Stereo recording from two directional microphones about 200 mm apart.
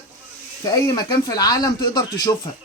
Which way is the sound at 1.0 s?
20° left (ahead or behind).